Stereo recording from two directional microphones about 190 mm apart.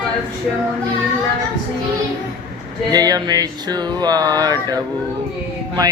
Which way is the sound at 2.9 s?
20° right (ahead or behind).